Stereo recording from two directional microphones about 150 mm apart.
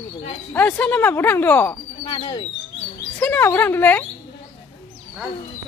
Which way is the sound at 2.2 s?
40° left (ahead or behind).